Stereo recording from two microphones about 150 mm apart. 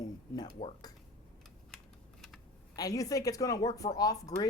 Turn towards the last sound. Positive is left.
turn(degrees=25)  # may be behind; listen again after turning